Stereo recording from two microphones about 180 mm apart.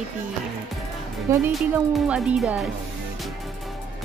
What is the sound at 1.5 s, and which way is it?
Speech, 5° right (ahead or behind).